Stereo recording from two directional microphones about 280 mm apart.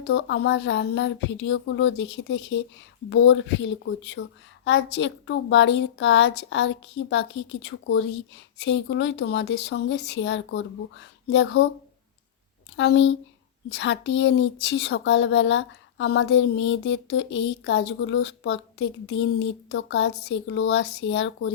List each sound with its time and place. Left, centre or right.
0.1 s speech: left
12.7 s speech: left